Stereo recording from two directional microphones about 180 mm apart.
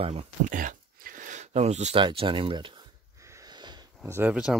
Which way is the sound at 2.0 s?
30° right (ahead or behind).